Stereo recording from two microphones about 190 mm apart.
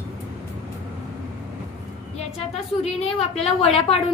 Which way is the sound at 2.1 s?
35° left (ahead or behind).